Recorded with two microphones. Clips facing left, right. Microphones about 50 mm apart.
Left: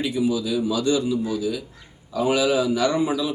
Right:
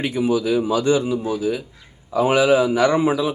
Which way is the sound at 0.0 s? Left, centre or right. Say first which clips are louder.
Right 3 dB; right.